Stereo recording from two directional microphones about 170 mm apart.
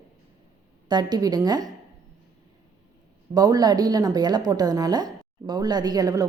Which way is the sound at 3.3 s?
20° right (ahead or behind).